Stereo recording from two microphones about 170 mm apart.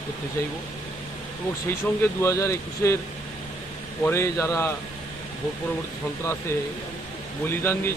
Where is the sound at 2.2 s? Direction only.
15° left (ahead or behind).